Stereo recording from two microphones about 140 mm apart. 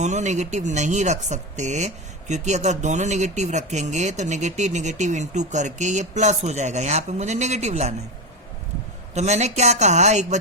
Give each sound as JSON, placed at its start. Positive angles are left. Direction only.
{"t": 0.0, "sound": "speech", "side_deg": -55}
{"t": 9.1, "sound": "speech", "side_deg": -55}